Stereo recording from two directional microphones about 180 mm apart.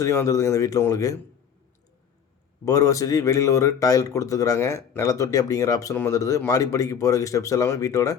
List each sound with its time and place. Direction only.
0.0 s speech: 15° left (ahead or behind)
2.6 s speech: 20° left (ahead or behind)